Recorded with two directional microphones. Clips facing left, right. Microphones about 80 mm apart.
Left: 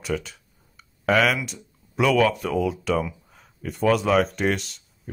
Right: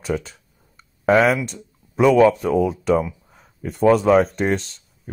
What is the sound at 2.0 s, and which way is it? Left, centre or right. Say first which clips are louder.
Speech: right 6 dB; right.